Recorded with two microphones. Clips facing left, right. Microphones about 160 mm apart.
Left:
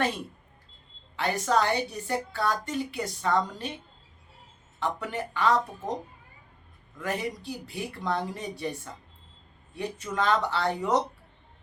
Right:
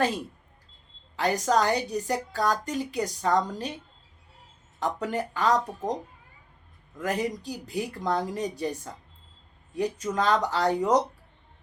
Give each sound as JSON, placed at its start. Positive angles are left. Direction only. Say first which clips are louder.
{"t": 1.1, "sound": "a woman's voice", "louder": "right 2 dB", "side_deg": -40}
{"t": 4.8, "sound": "a woman's voice", "louder": "right 3 dB", "side_deg": -40}
{"t": 7.0, "sound": "a woman's voice", "louder": "right 3 dB", "side_deg": -40}